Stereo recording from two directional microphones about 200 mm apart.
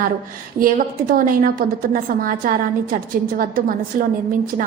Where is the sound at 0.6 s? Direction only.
45° right (ahead or behind).